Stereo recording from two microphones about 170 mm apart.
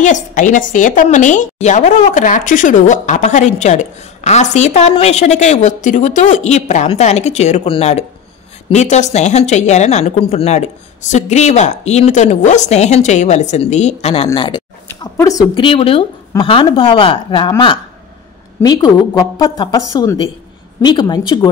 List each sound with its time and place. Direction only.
0.0 s a woman's voice: 45° left (ahead or behind); by 14.6 s 30° left (ahead or behind)
14.9 s speech: 20° left (ahead or behind)